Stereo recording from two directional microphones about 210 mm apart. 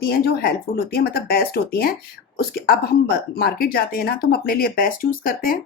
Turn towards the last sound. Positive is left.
turn(degrees=40)  # may be behind; listen again after turning